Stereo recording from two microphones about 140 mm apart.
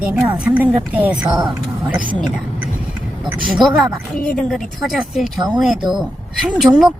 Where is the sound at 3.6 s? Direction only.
30° right (ahead or behind).